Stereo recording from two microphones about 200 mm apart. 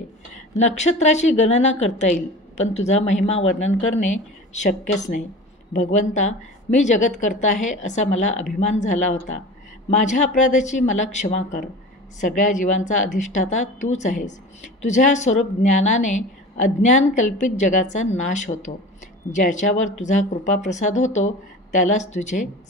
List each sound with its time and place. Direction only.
0.6 s a woman's voice: 35° left (ahead or behind)